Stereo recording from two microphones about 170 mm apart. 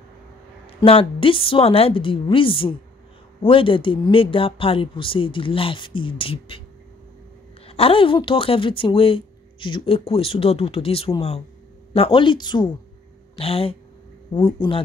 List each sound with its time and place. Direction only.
0.7 s speech: 35° left (ahead or behind)
7.6 s speech: 35° left (ahead or behind)